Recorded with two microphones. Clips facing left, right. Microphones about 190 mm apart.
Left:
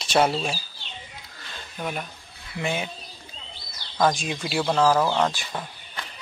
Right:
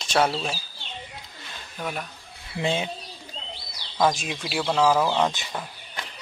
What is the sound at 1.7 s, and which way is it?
Speech, centre (ahead or behind).